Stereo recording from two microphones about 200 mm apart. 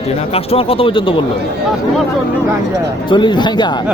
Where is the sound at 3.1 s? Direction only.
25° left (ahead or behind).